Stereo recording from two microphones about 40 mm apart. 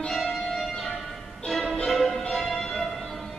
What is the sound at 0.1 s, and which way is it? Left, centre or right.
Music, centre.